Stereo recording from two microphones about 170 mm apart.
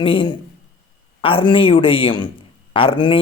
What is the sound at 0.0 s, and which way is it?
A man's voice, 30° left (ahead or behind).